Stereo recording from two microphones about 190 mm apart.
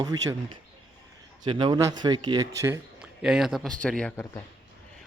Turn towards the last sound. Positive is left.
turn(degrees=10)  # may be behind; listen again after turning